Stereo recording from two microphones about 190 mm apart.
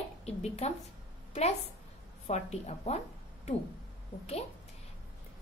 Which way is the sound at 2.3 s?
35° left (ahead or behind).